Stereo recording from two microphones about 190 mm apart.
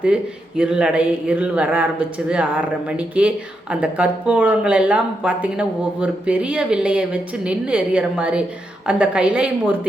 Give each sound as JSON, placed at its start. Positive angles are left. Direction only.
{"t": 0.0, "sound": "a man's voice", "side_deg": -5}